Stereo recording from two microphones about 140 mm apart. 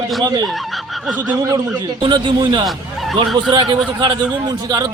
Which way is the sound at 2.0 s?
35° right (ahead or behind).